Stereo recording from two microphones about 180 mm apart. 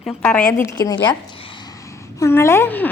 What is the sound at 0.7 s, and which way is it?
Speech, 25° left (ahead or behind).